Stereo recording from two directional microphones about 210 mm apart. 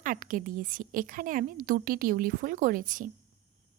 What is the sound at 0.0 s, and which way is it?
A woman's voice, 40° right (ahead or behind).